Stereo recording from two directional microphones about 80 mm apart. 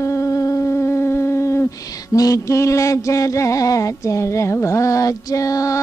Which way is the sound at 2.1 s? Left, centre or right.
Left.